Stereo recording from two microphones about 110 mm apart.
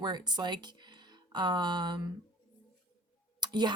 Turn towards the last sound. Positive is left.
turn(degrees=-40)  # may be behind; listen again after turning